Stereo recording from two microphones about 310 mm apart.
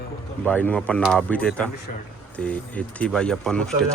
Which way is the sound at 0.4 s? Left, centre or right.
Centre.